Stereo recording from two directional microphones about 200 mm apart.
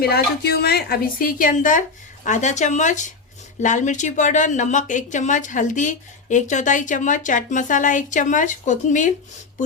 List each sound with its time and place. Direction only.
0.0 s a woman's voice: 50° left (ahead or behind)